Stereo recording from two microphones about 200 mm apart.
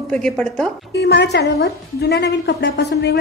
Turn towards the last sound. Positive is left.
turn(degrees=55)  # may be behind; listen again after turning